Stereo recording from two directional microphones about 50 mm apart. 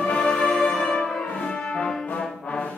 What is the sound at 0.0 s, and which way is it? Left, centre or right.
Music, left.